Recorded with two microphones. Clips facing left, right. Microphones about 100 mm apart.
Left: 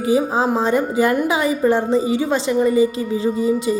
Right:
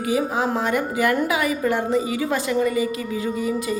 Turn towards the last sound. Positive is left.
turn(degrees=25)  # may be behind; listen again after turning